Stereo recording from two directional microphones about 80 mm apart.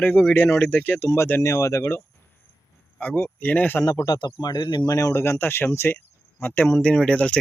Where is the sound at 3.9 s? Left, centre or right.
Left.